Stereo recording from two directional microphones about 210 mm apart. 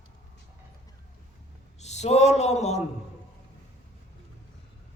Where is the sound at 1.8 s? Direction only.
30° left (ahead or behind).